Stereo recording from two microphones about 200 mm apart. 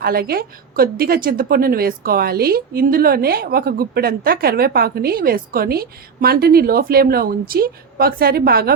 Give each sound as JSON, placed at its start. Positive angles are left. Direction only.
{"t": 0.0, "sound": "a woman's voice", "side_deg": -50}